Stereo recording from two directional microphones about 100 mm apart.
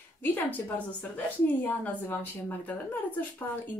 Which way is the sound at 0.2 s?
20° left (ahead or behind).